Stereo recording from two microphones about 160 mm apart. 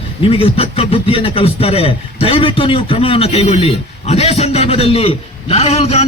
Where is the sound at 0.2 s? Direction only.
35° left (ahead or behind).